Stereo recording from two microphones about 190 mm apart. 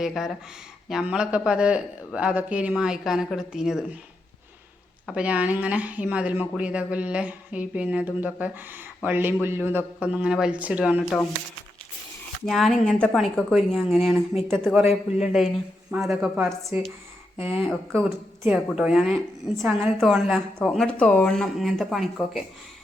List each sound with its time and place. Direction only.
0.0 s a man's voice: centre (ahead or behind)
5.0 s speech: 5° right (ahead or behind)
12.5 s a man's voice: centre (ahead or behind)
17.6 s a man's voice: centre (ahead or behind)